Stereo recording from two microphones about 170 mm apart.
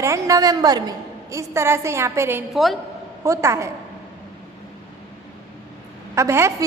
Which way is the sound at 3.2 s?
15° right (ahead or behind).